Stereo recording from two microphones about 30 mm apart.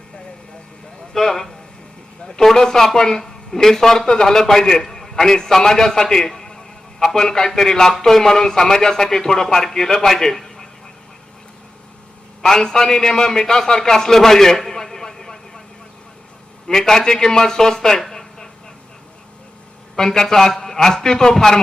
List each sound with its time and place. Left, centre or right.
1.1 s a sound: centre
2.4 s a man's voice: centre
12.4 s a man's voice: centre
14.8 s vehicle: centre
16.6 s a man's voice: centre
18.1 s a sound: centre
20.0 s speech: centre